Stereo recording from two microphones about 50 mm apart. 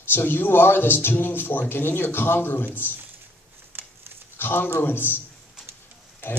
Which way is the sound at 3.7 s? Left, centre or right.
Right.